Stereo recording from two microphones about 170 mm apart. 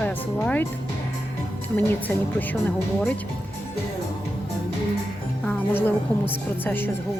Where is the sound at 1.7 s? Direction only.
10° left (ahead or behind).